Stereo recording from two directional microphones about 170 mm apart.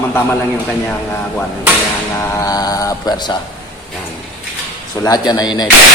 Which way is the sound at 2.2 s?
15° left (ahead or behind).